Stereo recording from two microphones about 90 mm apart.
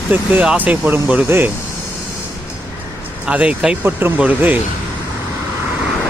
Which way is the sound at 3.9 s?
20° right (ahead or behind).